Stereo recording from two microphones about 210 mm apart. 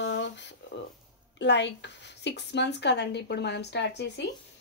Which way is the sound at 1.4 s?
55° left (ahead or behind).